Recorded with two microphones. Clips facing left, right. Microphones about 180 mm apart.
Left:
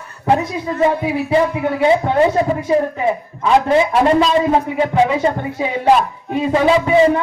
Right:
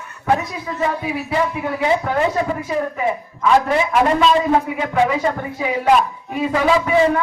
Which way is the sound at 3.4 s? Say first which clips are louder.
Left 3 dB; 30° left (ahead or behind).